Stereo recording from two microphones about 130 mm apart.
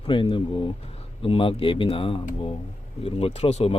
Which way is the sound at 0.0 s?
40° left (ahead or behind).